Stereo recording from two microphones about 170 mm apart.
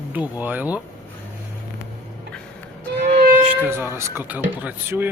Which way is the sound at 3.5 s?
10° right (ahead or behind).